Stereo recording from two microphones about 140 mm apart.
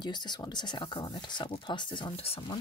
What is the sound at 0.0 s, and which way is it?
Speech, 30° left (ahead or behind).